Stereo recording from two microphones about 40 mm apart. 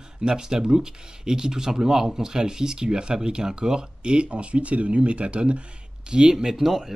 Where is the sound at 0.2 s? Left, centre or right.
Centre.